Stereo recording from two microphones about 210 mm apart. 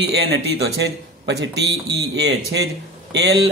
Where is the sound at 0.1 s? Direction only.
50° right (ahead or behind).